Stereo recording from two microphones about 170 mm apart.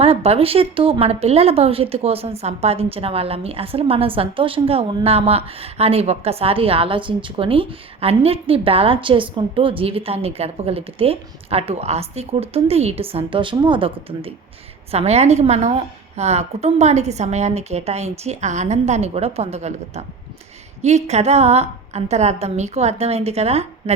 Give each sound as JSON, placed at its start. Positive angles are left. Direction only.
{"t": 0.0, "sound": "speech", "side_deg": -35}